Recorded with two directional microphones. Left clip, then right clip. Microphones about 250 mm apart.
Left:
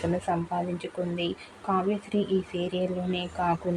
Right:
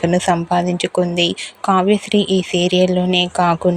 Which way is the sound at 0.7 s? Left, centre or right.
Right.